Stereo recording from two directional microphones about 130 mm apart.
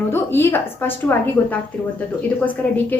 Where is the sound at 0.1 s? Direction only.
15° left (ahead or behind).